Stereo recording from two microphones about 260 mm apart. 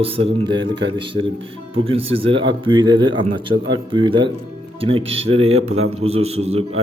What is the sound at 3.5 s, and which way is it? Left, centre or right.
Speech, right.